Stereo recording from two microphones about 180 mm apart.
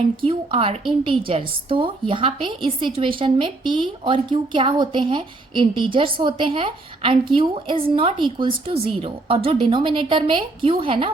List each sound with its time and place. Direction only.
0.2 s a woman's voice: 30° right (ahead or behind)